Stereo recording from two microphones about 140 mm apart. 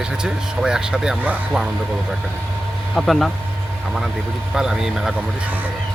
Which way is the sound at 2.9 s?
Centre (ahead or behind).